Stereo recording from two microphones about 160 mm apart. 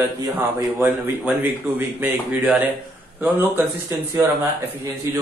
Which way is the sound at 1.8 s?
10° right (ahead or behind).